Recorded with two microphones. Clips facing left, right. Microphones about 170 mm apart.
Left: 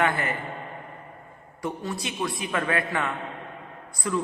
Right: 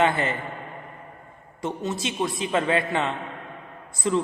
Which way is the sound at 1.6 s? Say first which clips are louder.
Right 3 dB; 25° right (ahead or behind).